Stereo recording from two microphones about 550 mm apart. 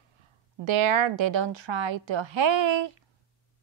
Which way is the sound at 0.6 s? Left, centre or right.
Right.